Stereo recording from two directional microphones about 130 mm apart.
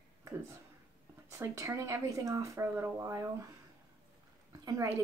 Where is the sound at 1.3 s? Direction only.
20° right (ahead or behind).